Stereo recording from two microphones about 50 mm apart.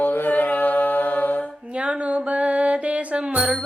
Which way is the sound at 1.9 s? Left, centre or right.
Right.